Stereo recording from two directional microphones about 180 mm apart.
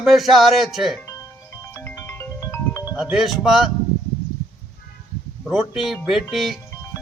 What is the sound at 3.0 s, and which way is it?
Speech, 5° right (ahead or behind).